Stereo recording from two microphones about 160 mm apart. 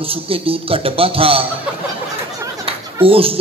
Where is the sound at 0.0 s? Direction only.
35° right (ahead or behind).